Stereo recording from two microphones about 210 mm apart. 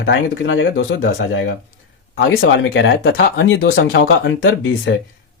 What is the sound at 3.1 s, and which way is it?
Speech, 65° left (ahead or behind).